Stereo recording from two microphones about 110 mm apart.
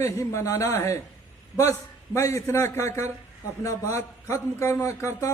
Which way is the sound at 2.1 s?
25° left (ahead or behind).